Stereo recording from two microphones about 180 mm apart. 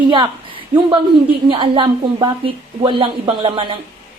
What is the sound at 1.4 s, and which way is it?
A woman's voice, 30° right (ahead or behind).